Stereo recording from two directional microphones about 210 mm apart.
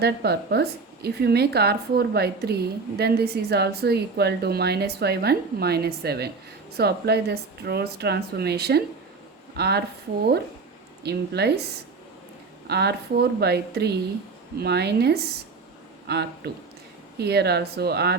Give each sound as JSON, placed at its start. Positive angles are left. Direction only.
{"t": 0.0, "sound": "a woman's voice", "side_deg": -50}
{"t": 11.0, "sound": "a woman's voice", "side_deg": -50}
{"t": 12.6, "sound": "a woman's voice", "side_deg": -50}